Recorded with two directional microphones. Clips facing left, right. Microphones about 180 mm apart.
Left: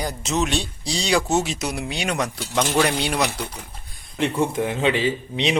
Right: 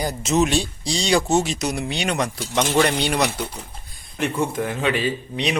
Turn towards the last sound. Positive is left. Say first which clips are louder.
# left 1 dB
turn(degrees=20)  # may be behind; listen again after turning